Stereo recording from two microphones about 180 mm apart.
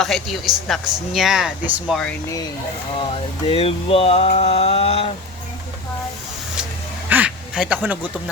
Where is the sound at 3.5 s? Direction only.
30° left (ahead or behind).